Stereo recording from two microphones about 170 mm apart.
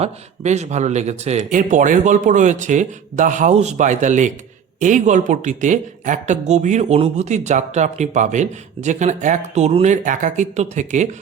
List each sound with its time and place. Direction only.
0.0 s speech: 40° right (ahead or behind)